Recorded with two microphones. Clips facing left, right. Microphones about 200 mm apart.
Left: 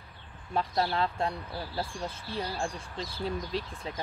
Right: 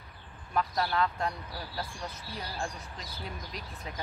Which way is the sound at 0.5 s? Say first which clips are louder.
Left 1 dB; 30° left (ahead or behind).